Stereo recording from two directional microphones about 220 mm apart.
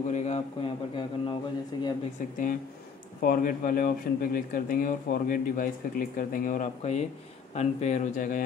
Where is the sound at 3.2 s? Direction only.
40° left (ahead or behind).